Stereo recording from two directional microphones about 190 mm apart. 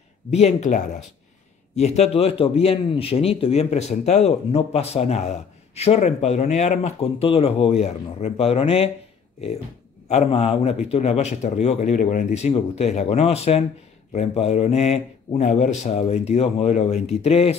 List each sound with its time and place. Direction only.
0.3 s a man's voice: 35° left (ahead or behind)
10.0 s a man's voice: 35° left (ahead or behind)